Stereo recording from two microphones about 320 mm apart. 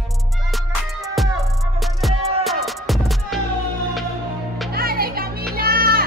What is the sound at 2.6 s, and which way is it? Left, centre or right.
Music, centre.